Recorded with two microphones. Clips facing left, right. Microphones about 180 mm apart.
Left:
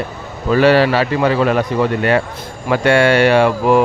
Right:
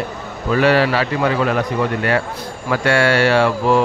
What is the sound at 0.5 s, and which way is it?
Speech, 30° left (ahead or behind).